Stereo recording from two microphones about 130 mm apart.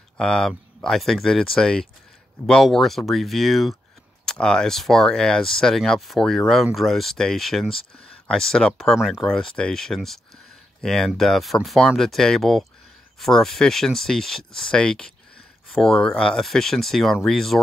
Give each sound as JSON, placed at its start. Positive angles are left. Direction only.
{"t": 0.2, "sound": "speech", "side_deg": 5}